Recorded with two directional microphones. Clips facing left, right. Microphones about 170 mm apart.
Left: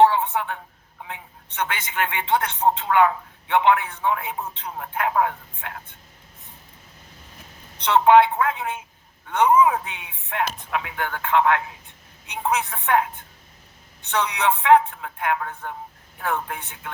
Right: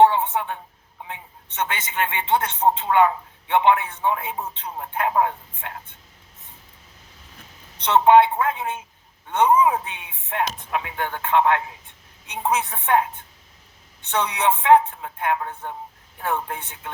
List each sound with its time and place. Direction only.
0.0 s a sound: 25° right (ahead or behind)
1.0 s a woman's voice: 25° right (ahead or behind)
7.9 s a woman's voice: 25° right (ahead or behind)
14.1 s a woman's voice: 25° right (ahead or behind)